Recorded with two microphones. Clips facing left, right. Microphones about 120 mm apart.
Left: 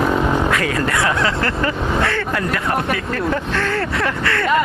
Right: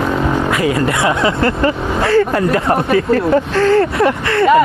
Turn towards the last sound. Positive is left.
turn(degrees=-25)  # may be behind; listen again after turning